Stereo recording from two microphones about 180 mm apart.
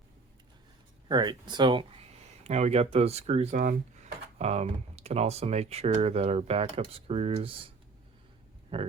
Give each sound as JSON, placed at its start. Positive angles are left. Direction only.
{"t": 1.0, "sound": "speech", "side_deg": -25}
{"t": 8.7, "sound": "speech", "side_deg": -30}